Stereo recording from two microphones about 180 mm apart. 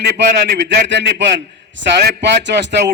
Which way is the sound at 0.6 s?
80° right.